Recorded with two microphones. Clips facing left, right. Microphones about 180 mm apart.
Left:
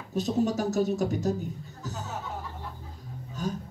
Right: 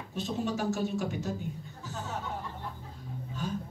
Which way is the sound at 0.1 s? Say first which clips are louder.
Left 6 dB; 40° left (ahead or behind).